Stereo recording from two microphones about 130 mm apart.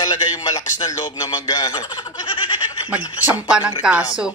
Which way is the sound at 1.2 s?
30° left (ahead or behind).